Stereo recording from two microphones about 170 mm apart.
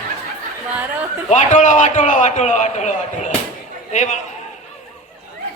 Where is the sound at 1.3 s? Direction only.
45° left (ahead or behind).